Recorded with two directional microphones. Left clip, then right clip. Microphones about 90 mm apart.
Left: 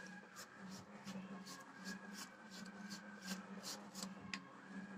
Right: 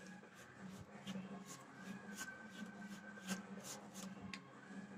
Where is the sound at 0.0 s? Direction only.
35° right (ahead or behind).